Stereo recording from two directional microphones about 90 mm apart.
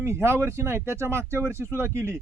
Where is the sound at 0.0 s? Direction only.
30° right (ahead or behind).